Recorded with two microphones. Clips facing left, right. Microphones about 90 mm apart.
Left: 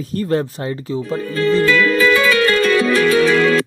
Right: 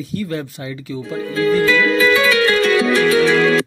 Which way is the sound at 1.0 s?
10° right (ahead or behind).